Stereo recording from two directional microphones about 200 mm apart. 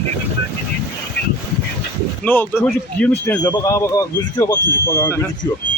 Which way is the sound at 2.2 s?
10° left (ahead or behind).